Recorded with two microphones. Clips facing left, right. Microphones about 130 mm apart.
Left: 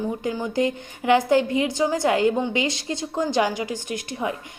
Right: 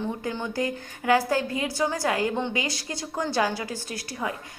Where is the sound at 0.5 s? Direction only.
20° left (ahead or behind).